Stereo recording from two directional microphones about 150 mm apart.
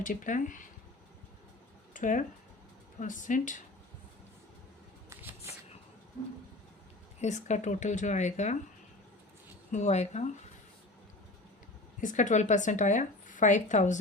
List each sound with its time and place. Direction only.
0.0 s speech: 60° left (ahead or behind)
1.9 s a sound: 60° left (ahead or behind)
3.0 s speech: 60° left (ahead or behind)
5.0 s a sound: 15° right (ahead or behind)
7.2 s speech: 50° left (ahead or behind)
9.7 s speech: 50° left (ahead or behind)
11.9 s speech: 55° left (ahead or behind)